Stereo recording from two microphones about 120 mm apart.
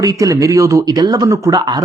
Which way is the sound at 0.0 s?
30° right (ahead or behind).